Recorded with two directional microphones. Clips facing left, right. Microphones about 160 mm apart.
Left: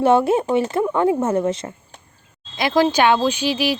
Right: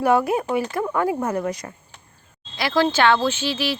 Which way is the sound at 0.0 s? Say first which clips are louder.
Left 4 dB; 25° left (ahead or behind).